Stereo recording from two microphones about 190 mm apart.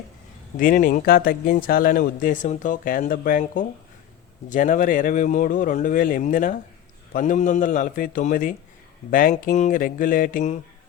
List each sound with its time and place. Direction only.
0.5 s speech: 45° left (ahead or behind)